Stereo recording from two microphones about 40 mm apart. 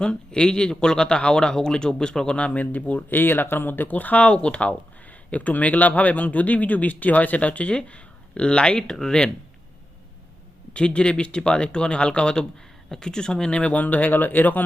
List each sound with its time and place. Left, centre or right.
0.0 s speech: left
2.6 s a man's voice: left
3.1 s a man's voice: left; by 9.3 s centre
10.8 s a man's voice: left